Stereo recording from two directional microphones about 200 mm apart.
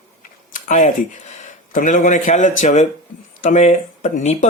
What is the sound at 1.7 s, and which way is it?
Speech, 40° left (ahead or behind).